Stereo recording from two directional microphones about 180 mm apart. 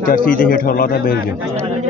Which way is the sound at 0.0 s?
50° left (ahead or behind).